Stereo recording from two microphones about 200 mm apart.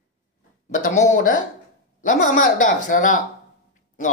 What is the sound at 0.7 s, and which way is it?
Speech, 40° left (ahead or behind).